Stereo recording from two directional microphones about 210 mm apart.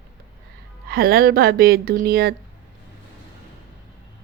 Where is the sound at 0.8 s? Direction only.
45° right (ahead or behind).